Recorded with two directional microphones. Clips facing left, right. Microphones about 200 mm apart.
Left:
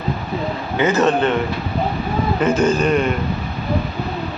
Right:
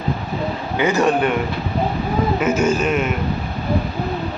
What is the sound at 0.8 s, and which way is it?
Speech, 15° right (ahead or behind).